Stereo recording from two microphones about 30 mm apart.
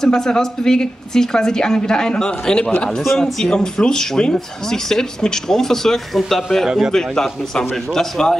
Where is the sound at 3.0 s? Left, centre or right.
Centre.